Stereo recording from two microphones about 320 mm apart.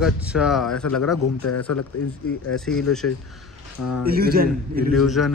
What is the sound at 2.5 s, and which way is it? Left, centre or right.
Speech, centre.